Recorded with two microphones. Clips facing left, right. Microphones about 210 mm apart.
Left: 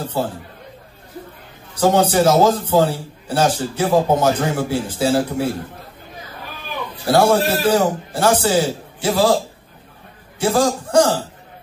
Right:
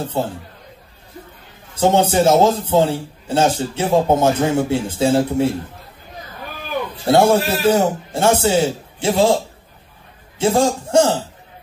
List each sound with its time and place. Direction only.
0.0 s a man's voice: 25° right (ahead or behind)
1.8 s a man's voice: 25° right (ahead or behind)
7.1 s a man's voice: 25° right (ahead or behind)
10.4 s a man's voice: 25° right (ahead or behind)